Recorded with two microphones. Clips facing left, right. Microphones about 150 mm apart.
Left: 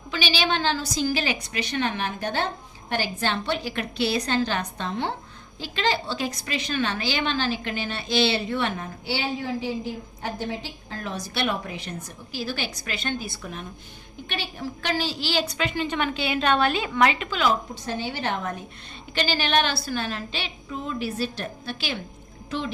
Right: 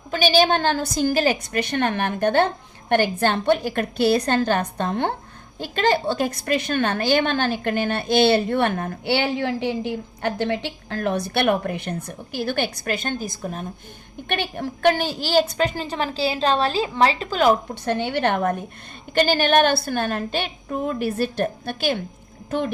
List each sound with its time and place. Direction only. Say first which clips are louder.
0.1 s a woman's voice: right 8 dB; 45° right (ahead or behind)
14.3 s a woman's voice: right 6 dB; 55° right (ahead or behind); by 17.5 s 40° right (ahead or behind)
17.8 s a woman's voice: right 8 dB; 65° right (ahead or behind)